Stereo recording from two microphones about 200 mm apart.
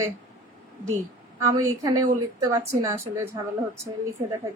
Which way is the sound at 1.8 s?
15° right (ahead or behind).